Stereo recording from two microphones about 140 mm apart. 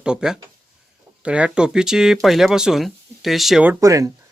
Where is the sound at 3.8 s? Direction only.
25° right (ahead or behind).